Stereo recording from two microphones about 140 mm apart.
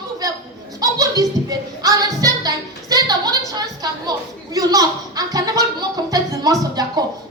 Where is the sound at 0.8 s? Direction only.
25° right (ahead or behind).